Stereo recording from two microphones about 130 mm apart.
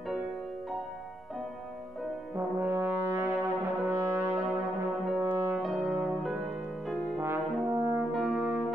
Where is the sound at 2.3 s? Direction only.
15° right (ahead or behind).